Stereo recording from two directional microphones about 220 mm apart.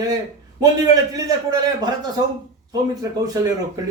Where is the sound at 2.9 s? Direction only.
15° right (ahead or behind).